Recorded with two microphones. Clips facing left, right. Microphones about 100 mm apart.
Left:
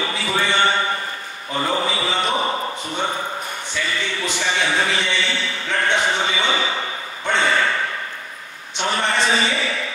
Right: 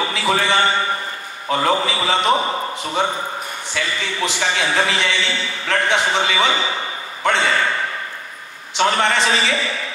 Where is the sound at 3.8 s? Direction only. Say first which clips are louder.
Right 2 dB; 90° right.